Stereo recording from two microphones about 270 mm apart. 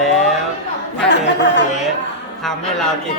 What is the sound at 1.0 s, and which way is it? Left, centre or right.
Speech, left.